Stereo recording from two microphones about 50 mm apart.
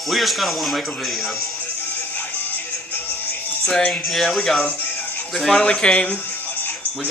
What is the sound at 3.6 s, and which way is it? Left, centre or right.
Music, centre.